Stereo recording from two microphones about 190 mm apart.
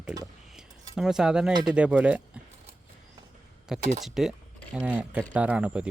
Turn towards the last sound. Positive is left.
turn(degrees=-5)  # may be behind; listen again after turning